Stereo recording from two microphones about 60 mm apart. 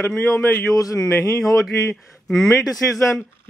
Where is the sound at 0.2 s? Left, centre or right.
Left.